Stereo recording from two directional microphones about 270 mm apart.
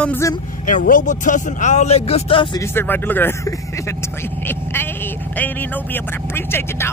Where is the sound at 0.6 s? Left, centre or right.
Left.